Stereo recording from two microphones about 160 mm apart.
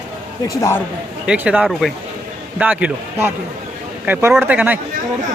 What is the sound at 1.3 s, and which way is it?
Speech, 5° right (ahead or behind).